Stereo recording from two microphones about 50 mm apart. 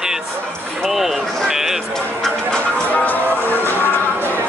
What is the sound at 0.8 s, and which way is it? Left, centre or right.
Speech, centre.